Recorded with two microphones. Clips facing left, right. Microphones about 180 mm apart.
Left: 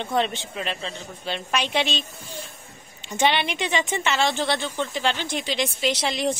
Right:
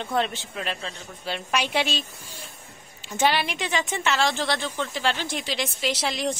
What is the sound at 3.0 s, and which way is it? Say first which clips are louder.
A woman's voice: left 1 dB; centre (ahead or behind).